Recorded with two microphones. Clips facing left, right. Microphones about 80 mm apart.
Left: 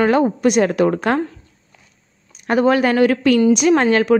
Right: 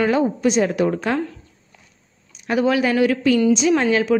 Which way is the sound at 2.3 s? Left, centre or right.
Left.